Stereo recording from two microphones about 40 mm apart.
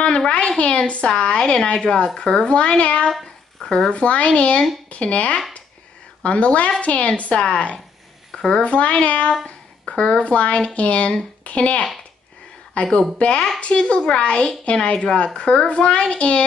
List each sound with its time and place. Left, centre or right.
0.3 s speech: left
1.1 s a child's voice: centre
3.6 s speech: centre
3.9 s a child's voice: left
13.2 s a child's voice: left